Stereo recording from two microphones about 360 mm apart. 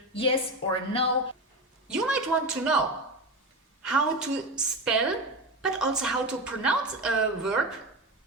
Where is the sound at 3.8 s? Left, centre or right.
Centre.